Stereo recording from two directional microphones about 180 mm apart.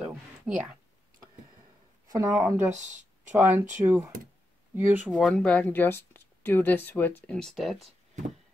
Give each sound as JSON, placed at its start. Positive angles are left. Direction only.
{"t": 0.0, "sound": "a sound", "side_deg": -5}
{"t": 2.0, "sound": "a sound", "side_deg": -20}
{"t": 2.4, "sound": "speech", "side_deg": -15}
{"t": 2.7, "sound": "speech", "side_deg": -40}
{"t": 3.3, "sound": "speech", "side_deg": -15}
{"t": 5.1, "sound": "speech", "side_deg": 5}